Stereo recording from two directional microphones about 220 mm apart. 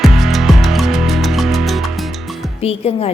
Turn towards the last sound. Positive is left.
turn(degrees=25)  # may be behind; listen again after turning